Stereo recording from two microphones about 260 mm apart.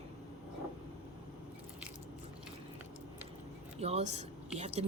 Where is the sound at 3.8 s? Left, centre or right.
Right.